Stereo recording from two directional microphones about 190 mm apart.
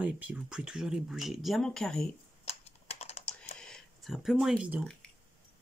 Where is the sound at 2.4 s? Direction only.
35° left (ahead or behind).